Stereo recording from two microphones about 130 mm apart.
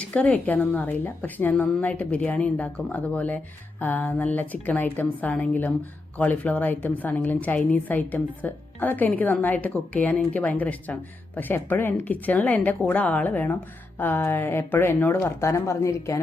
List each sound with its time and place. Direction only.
0.0 s a woman's voice: 10° left (ahead or behind)